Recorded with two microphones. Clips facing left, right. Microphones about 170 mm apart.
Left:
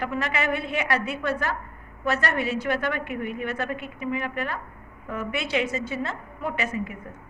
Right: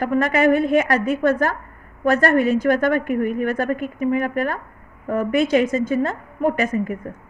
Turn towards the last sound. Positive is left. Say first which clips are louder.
# right 8 dB
turn(degrees=-50)  # may be behind; listen again after turning